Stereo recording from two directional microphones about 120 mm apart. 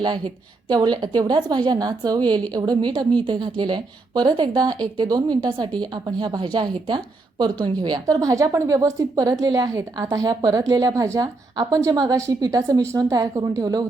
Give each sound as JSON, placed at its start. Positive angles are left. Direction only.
{"t": 0.7, "sound": "a woman's voice", "side_deg": -35}